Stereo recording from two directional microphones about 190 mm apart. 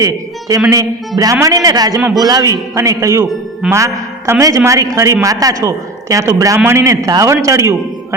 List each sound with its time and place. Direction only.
0.0 s a man's voice: 20° right (ahead or behind)